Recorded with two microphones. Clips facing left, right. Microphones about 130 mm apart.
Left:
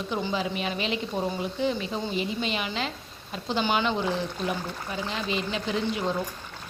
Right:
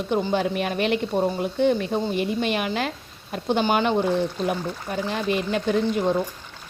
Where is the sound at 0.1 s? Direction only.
55° right (ahead or behind).